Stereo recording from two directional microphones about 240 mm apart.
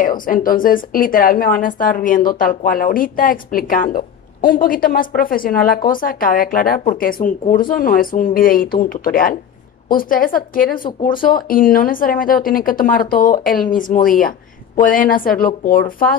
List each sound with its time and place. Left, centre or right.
0.0 s speech: left